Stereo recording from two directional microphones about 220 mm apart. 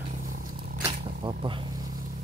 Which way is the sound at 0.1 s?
40° right (ahead or behind).